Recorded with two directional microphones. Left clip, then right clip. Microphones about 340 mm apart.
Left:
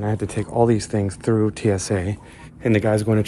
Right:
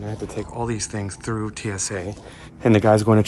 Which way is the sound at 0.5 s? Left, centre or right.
Centre.